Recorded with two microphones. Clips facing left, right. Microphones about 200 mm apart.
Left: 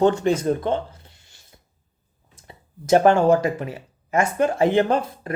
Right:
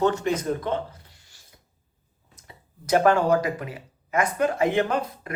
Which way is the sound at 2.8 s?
25° left (ahead or behind).